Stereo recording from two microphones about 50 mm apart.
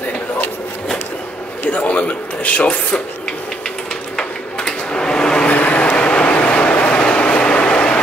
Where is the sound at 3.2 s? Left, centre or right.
Centre.